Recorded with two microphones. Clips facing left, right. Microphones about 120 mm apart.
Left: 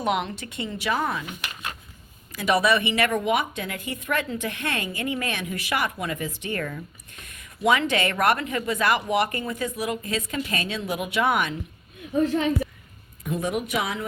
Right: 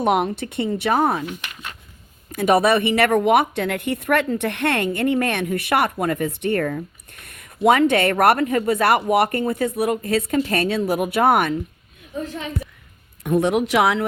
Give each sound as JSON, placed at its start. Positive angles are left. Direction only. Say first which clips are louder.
{"t": 0.0, "sound": "speech", "louder": "right 6 dB", "side_deg": -55}
{"t": 2.3, "sound": "a woman's voice", "louder": "right 5 dB", "side_deg": -55}
{"t": 8.4, "sound": "a woman's voice", "louder": "right 7 dB", "side_deg": -45}
{"t": 13.2, "sound": "speech", "louder": "right 8 dB", "side_deg": -70}